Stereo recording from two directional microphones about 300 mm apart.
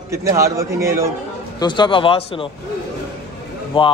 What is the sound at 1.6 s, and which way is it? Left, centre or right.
Speech, centre.